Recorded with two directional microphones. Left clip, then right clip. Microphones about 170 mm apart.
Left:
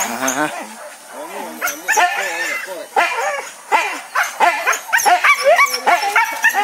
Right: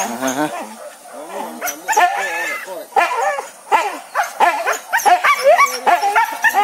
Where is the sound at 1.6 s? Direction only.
30° right (ahead or behind).